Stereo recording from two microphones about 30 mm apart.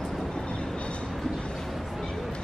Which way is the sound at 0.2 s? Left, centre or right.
Left.